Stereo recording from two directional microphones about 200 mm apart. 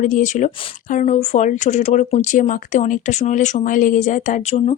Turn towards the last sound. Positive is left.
turn(degrees=40)  # may be behind; listen again after turning